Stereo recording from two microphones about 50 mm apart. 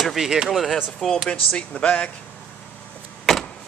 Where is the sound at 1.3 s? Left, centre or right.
Left.